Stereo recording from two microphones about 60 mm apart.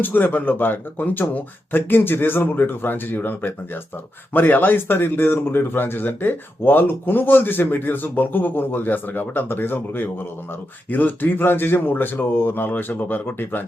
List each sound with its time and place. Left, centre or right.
0.0 s speech: left